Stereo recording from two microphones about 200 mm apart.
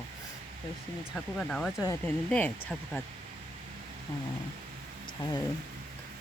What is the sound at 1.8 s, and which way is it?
Speech, 15° left (ahead or behind).